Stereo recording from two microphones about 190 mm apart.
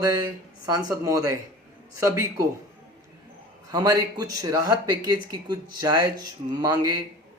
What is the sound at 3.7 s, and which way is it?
Speech, 20° right (ahead or behind).